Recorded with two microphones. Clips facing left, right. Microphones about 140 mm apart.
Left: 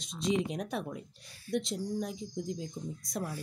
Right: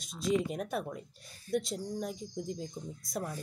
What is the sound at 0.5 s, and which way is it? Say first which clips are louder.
Speech: even; centre (ahead or behind).